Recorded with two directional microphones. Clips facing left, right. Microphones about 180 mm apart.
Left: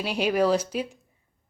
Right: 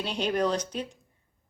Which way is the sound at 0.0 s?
5° left (ahead or behind).